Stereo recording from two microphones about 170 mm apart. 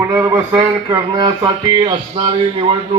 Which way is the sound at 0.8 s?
25° right (ahead or behind).